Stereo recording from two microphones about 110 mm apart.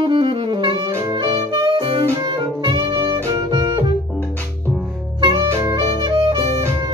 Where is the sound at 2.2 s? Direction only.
40° right (ahead or behind).